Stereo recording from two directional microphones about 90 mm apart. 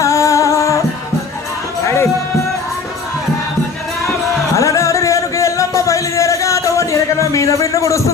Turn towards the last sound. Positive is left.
turn(degrees=35)  # may be behind; listen again after turning